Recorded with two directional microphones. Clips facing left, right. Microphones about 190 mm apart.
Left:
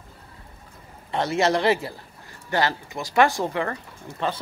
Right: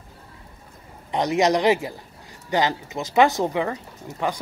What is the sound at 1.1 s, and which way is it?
Speech, 15° right (ahead or behind).